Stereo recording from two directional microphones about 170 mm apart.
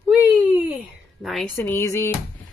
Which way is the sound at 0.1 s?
10° right (ahead or behind).